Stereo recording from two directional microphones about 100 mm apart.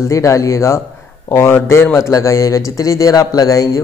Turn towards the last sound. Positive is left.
turn(degrees=35)  # may be behind; listen again after turning